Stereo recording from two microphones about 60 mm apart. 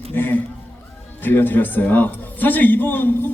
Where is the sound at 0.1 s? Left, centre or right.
Left.